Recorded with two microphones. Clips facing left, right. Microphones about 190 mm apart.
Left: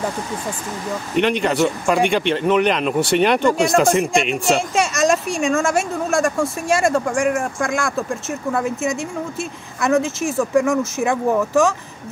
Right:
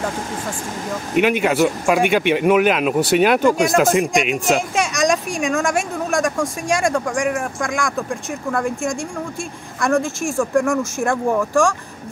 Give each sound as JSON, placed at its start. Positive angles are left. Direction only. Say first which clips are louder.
{"t": 1.1, "sound": "speech", "louder": "right 2 dB", "side_deg": -5}